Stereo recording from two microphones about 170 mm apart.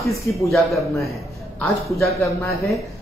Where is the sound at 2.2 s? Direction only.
Centre (ahead or behind).